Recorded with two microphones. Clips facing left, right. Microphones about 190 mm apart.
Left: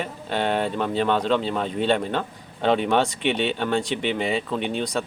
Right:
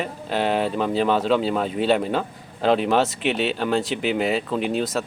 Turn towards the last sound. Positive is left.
turn(degrees=-5)  # may be behind; listen again after turning